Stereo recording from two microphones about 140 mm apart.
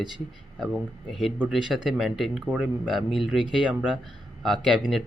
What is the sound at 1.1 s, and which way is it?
Speech, centre (ahead or behind).